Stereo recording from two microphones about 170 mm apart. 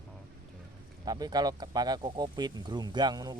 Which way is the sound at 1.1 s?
25° right (ahead or behind).